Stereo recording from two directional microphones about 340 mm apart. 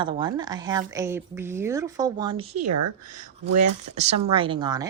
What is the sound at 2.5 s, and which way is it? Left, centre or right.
Speech, right.